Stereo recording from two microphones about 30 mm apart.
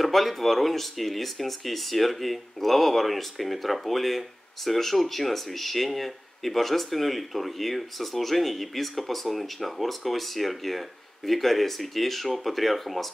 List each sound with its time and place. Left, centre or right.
0.0 s speech: centre